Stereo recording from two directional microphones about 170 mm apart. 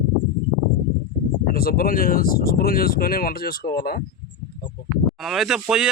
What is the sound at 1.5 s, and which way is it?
Speech, 60° left (ahead or behind).